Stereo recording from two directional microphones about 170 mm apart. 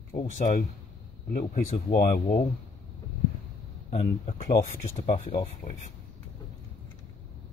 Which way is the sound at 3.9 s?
40° left (ahead or behind).